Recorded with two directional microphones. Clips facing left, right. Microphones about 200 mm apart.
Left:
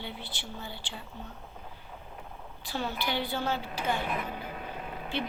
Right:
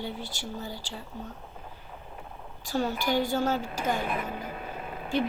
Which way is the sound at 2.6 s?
45° right (ahead or behind).